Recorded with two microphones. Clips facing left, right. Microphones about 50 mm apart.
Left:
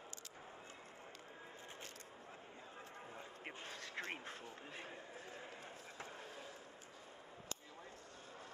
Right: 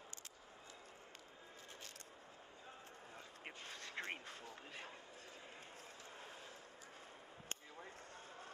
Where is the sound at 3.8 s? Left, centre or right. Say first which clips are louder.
Even; right.